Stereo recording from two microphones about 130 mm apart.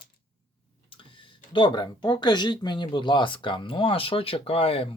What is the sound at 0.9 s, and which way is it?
Tick-tock, 40° left (ahead or behind).